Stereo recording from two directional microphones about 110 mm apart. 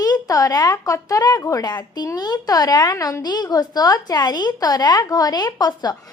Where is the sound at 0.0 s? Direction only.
35° left (ahead or behind).